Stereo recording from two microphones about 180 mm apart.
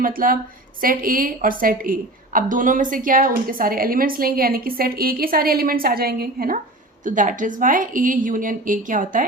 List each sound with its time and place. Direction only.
0.0 s a woman's voice: 50° right (ahead or behind)
7.0 s a woman's voice: 45° right (ahead or behind)